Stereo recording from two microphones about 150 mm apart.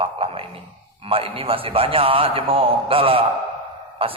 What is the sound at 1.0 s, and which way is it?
A man's voice, 40° right (ahead or behind).